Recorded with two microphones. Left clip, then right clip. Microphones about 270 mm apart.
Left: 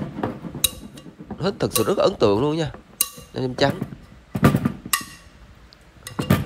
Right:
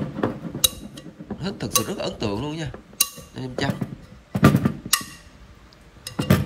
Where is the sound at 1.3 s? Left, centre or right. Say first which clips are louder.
Left 4 dB; centre.